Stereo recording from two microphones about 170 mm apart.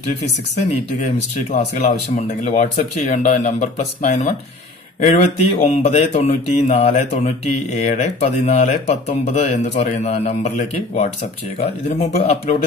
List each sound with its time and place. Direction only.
0.6 s speech: 40° left (ahead or behind)